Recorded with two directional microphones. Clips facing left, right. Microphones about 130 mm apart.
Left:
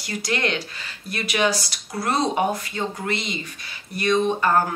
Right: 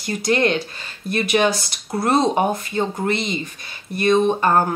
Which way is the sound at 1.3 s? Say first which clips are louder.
Right 3 dB; 25° right (ahead or behind).